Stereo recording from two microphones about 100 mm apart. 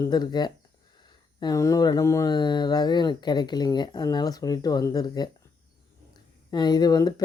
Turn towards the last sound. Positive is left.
turn(degrees=40)  # may be behind; listen again after turning